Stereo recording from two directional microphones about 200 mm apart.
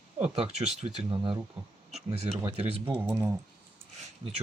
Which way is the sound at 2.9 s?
10° right (ahead or behind).